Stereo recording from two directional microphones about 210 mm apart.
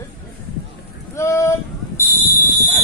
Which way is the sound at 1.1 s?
15° left (ahead or behind).